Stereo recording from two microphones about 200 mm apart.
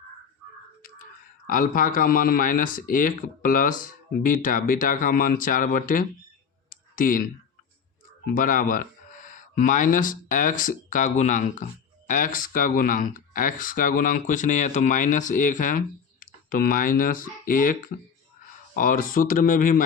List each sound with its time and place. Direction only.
0.8 s a sound: 45° left (ahead or behind)
1.5 s speech: 45° left (ahead or behind)
6.7 s clicking: 45° left (ahead or behind)
8.3 s speech: 45° left (ahead or behind)
18.8 s speech: 45° left (ahead or behind)